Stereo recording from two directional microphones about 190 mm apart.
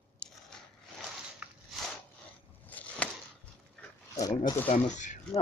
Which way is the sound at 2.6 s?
10° left (ahead or behind).